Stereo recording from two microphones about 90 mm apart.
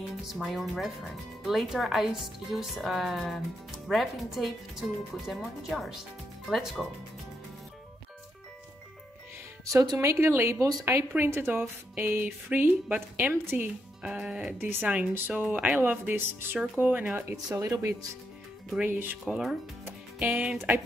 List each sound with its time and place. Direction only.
0.3 s speech: centre (ahead or behind)
9.7 s speech: 40° right (ahead or behind)
9.9 s speech: 25° right (ahead or behind)
13.3 s speech: 25° right (ahead or behind)
14.0 s speech: 10° right (ahead or behind)
14.6 s speech: 20° right (ahead or behind)
17.5 s speech: 35° right (ahead or behind)
19.2 s speech: centre (ahead or behind)
20.2 s speech: 15° right (ahead or behind)